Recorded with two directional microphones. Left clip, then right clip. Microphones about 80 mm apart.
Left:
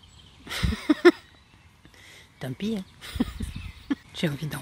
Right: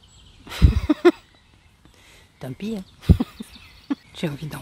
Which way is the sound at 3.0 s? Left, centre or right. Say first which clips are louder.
Right 7 dB; right.